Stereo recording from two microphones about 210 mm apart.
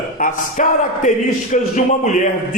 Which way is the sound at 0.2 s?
40° left (ahead or behind).